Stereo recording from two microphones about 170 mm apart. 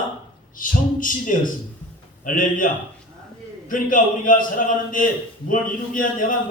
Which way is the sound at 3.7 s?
55° left (ahead or behind).